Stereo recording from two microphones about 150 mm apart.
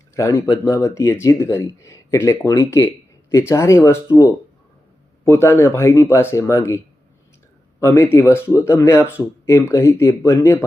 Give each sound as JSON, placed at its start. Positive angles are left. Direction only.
{"t": 0.2, "sound": "speech", "side_deg": 20}